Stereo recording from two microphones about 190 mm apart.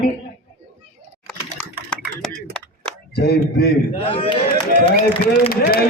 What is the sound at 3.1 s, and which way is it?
Speech, 60° left (ahead or behind).